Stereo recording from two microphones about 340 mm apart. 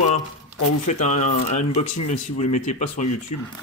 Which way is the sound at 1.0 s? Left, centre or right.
Left.